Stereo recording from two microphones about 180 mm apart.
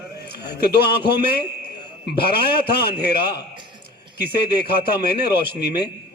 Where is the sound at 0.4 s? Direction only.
65° left (ahead or behind).